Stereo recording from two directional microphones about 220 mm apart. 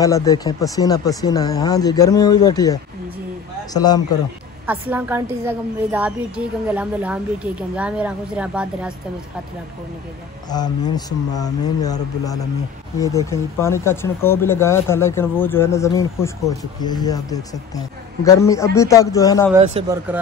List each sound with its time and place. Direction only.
0.0 s speech: 15° left (ahead or behind)
4.6 s a woman's voice: 10° right (ahead or behind)
10.5 s speech: 20° left (ahead or behind)
19.8 s speech: 25° right (ahead or behind)